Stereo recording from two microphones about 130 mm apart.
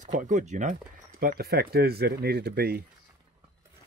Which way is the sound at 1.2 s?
90° right.